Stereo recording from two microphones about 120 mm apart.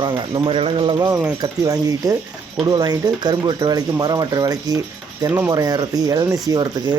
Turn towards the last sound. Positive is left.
turn(degrees=-35)  # may be behind; listen again after turning